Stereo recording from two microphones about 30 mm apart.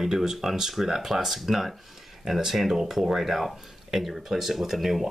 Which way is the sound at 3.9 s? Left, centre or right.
Centre.